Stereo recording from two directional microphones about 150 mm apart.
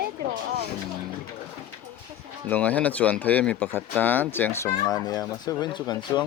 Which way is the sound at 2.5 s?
10° left (ahead or behind).